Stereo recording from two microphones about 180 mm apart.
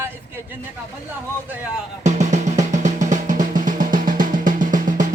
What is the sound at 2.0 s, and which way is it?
Drum, 40° right (ahead or behind).